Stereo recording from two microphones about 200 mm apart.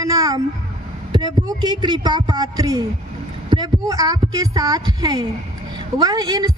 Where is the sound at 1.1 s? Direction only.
20° right (ahead or behind).